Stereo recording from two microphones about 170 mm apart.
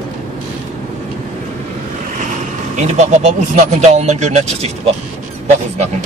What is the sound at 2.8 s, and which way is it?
Speech, 45° right (ahead or behind).